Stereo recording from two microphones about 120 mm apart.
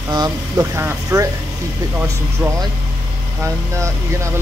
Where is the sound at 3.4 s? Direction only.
25° right (ahead or behind).